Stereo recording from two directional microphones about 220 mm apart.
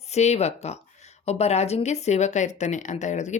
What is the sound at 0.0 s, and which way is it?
Speech, 30° left (ahead or behind).